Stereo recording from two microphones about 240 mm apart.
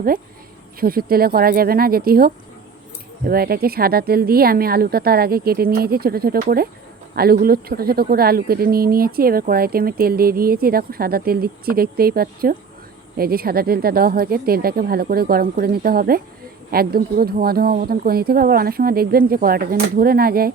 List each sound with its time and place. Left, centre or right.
0.8 s speech: right